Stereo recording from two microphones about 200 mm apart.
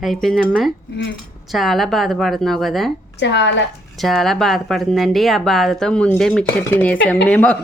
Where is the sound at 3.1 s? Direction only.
60° left (ahead or behind).